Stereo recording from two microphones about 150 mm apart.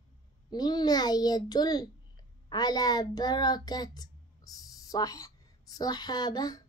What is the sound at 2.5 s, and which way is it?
Speech, 25° left (ahead or behind).